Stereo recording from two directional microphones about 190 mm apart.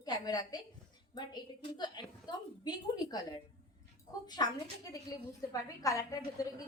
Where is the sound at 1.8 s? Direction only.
20° left (ahead or behind).